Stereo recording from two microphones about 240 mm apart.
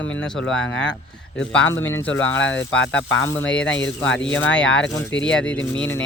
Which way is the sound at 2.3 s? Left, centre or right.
Left.